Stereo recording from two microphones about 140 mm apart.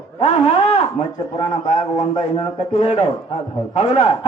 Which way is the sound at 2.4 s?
45° left (ahead or behind).